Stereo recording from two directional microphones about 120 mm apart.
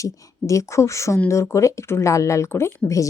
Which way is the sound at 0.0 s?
25° left (ahead or behind).